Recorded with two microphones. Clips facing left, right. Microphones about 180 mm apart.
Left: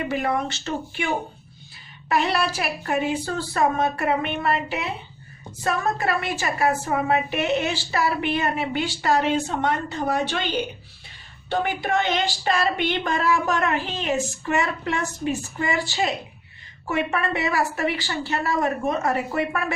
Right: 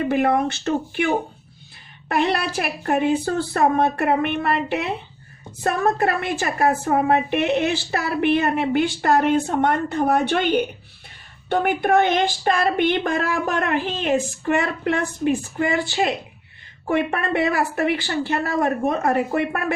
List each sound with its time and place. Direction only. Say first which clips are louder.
0.1 s a woman's voice: right 5 dB; 55° right (ahead or behind)